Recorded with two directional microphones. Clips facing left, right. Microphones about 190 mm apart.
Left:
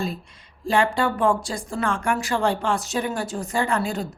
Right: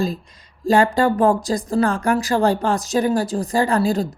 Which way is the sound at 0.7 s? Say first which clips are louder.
Right 5 dB; 40° right (ahead or behind).